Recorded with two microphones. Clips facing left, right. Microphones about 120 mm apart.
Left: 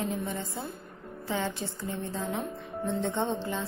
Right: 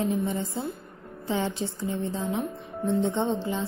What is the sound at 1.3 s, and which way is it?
A woman's voice, 20° right (ahead or behind).